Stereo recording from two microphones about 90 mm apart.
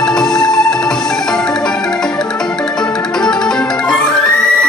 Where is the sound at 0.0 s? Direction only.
5° left (ahead or behind).